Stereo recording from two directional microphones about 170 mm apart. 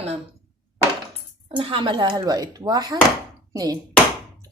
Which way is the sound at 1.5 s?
30° right (ahead or behind).